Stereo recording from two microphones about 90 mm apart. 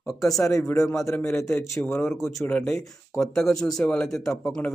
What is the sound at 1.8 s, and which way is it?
Speech, 20° left (ahead or behind).